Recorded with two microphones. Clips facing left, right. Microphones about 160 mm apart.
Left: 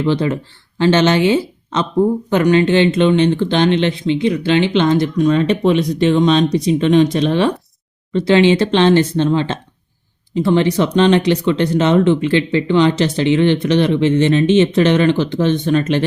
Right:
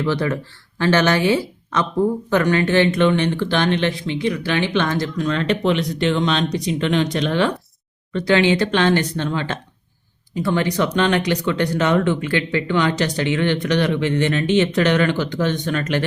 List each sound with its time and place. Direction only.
0.0 s a woman's voice: 20° left (ahead or behind)